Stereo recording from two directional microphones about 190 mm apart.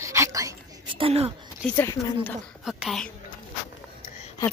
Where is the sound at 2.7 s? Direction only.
Centre (ahead or behind).